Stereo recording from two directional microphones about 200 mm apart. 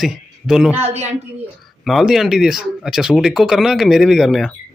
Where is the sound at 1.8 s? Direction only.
Centre (ahead or behind).